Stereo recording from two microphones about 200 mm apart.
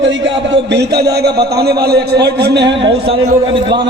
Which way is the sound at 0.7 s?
55° right (ahead or behind).